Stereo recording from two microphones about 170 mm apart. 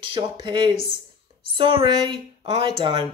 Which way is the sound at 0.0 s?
30° right (ahead or behind).